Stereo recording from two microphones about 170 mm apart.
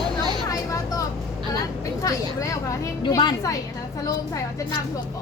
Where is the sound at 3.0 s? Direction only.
25° left (ahead or behind).